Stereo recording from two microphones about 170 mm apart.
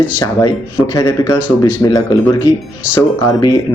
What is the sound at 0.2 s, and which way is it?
A man's voice, 20° left (ahead or behind).